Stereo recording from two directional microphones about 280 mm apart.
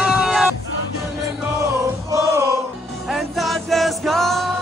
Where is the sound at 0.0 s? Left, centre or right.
Centre.